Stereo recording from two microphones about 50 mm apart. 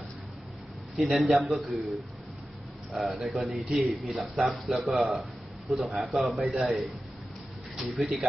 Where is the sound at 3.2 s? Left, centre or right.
Centre.